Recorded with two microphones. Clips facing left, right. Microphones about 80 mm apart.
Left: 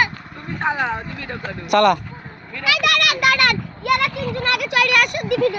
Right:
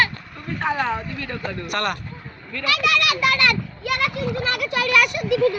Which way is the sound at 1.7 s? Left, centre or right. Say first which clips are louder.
Left 12 dB; left.